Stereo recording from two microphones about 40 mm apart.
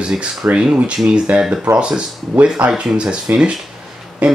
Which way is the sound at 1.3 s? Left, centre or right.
Right.